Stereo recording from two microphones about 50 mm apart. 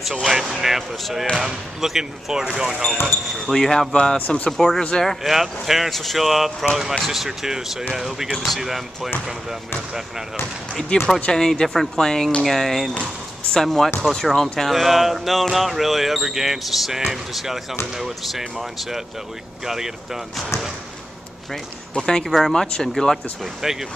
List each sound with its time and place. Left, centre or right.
0.0 s speech: centre
3.5 s speech: centre
5.2 s speech: centre
10.9 s speech: centre
21.9 s speech: centre
22.2 s speech: centre
22.5 s speech: centre
23.6 s speech: centre